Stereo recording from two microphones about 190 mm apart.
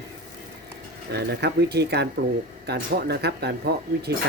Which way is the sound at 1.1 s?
60° right (ahead or behind).